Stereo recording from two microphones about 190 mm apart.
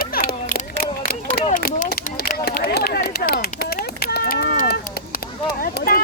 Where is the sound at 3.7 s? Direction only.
55° left (ahead or behind).